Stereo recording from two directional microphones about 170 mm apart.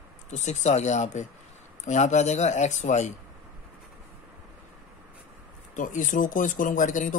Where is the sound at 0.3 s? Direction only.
45° left (ahead or behind).